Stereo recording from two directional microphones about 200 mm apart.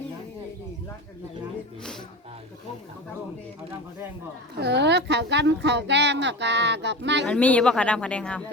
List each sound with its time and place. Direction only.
4.6 s speech: 60° right (ahead or behind)
7.3 s speech: 5° left (ahead or behind)